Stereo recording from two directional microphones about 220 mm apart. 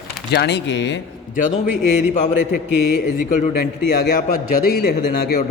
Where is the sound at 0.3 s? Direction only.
50° left (ahead or behind).